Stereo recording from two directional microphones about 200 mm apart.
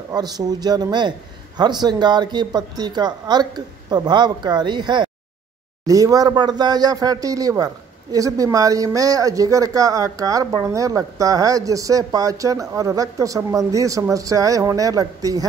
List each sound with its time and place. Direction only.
0.1 s speech: 20° right (ahead or behind)